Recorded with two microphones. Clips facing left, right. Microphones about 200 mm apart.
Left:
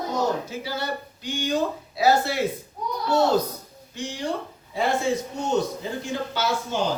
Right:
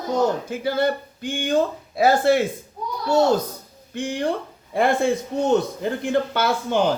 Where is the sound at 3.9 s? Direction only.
55° right (ahead or behind).